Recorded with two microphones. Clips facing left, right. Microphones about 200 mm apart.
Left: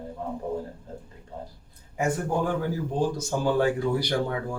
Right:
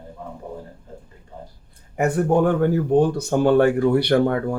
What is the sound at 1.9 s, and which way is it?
Speech, 65° right (ahead or behind).